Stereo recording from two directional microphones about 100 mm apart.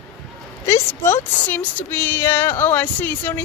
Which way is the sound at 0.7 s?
25° left (ahead or behind).